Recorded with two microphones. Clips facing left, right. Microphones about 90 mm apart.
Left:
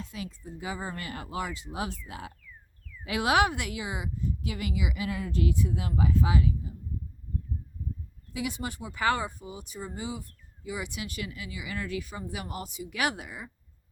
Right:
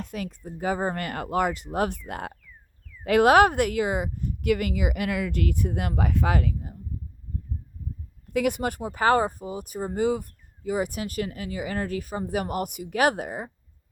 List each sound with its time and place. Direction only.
0.0 s speech: 60° right (ahead or behind)
5.0 s speech: 70° right (ahead or behind)
8.3 s speech: 60° right (ahead or behind)
8.8 s speech: 40° right (ahead or behind)